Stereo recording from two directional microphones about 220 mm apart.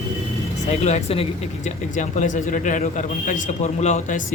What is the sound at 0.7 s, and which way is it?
Speech, 30° left (ahead or behind).